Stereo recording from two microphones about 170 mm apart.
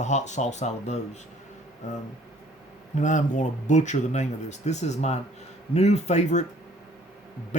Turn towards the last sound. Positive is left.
turn(degrees=45)  # may be behind; listen again after turning